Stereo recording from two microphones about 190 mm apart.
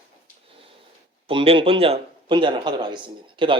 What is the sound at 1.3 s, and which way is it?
Speech, 30° right (ahead or behind).